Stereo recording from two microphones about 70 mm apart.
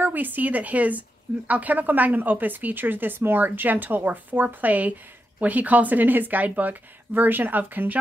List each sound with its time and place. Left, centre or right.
0.0 s a woman's voice: right